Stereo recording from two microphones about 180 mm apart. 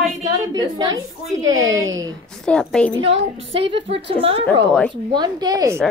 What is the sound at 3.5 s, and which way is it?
Speech, 30° right (ahead or behind).